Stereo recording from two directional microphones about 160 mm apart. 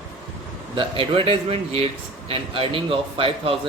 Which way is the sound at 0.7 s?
35° right (ahead or behind).